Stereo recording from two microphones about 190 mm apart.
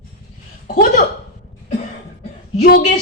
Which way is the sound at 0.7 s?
55° left (ahead or behind).